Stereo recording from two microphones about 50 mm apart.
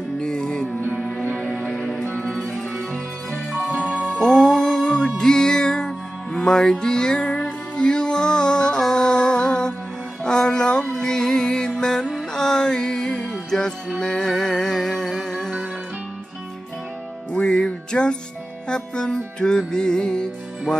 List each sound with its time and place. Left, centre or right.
0.2 s music: centre
1.3 s music: left
2.0 s music: left
4.1 s music: centre
17.3 s music: centre